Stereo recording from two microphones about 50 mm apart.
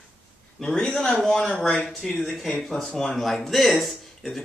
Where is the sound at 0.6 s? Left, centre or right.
Centre.